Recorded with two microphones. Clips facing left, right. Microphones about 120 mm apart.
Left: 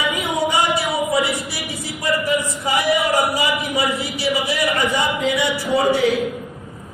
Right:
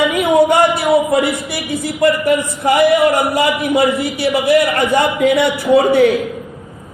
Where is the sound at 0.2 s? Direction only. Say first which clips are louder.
Right 10 dB; 60° right (ahead or behind).